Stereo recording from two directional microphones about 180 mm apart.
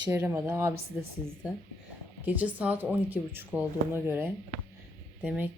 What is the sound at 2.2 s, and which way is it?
Speech, 10° right (ahead or behind).